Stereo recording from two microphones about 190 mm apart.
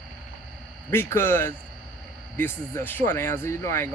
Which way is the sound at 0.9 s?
15° left (ahead or behind).